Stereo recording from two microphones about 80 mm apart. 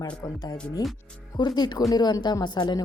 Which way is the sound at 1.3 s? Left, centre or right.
Left.